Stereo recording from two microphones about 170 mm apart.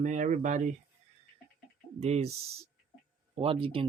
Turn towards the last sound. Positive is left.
turn(degrees=-35)  # may be behind; listen again after turning